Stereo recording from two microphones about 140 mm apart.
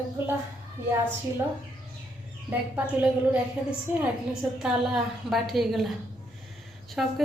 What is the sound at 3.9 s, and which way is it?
A woman's voice, 10° right (ahead or behind).